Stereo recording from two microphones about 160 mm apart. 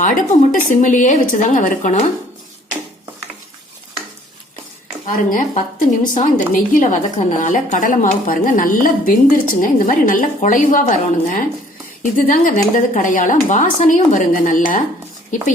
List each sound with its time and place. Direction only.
0.0 s speech: 55° left (ahead or behind)
5.0 s a woman's voice: 55° left (ahead or behind)